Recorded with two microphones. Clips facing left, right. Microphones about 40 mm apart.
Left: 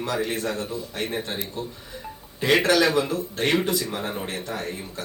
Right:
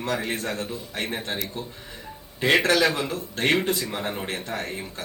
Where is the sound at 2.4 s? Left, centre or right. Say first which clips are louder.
Left 1 dB; right.